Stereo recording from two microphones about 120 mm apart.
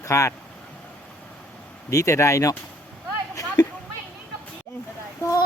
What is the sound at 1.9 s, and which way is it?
Speech, 25° left (ahead or behind).